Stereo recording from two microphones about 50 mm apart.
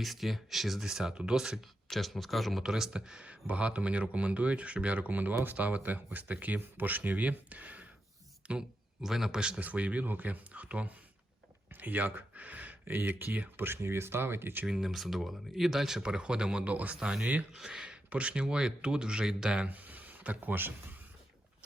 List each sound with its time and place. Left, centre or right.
0.0 s speech: centre
1.9 s speech: centre
2.6 s speech: centre
9.0 s speech: centre
9.6 s speech: right
11.7 s a sound: right
12.8 s speech: right
13.6 s speech: right
14.7 s speech: centre
16.0 s speech: centre
16.6 s speech: right
17.0 s speech: centre
19.7 s speech: right